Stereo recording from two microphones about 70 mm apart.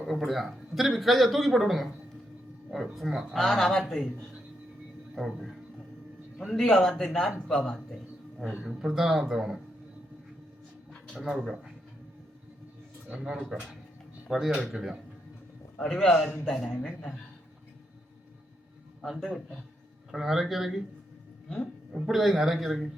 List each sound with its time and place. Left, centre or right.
0.0 s a man's voice: centre
3.1 s speech: centre
3.3 s a man's voice: centre
5.1 s a man's voice: centre
8.4 s speech: centre
8.7 s a man's voice: centre
11.1 s a man's voice: centre
13.1 s a man's voice: centre
15.9 s a man's voice: centre
20.1 s a man's voice: centre
22.0 s a man's voice: centre